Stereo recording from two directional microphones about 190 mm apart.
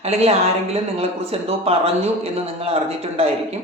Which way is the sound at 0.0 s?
35° right (ahead or behind).